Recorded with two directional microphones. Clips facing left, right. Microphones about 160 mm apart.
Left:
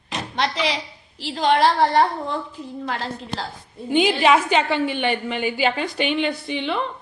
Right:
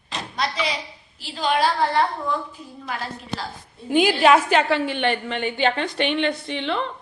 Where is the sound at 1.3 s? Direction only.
70° left (ahead or behind).